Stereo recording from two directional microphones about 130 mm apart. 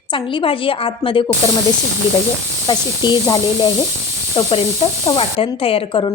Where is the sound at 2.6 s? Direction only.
35° left (ahead or behind).